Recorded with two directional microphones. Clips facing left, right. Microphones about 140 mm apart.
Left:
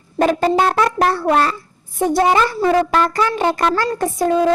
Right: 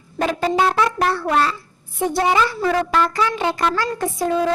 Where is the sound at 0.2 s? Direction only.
45° left (ahead or behind).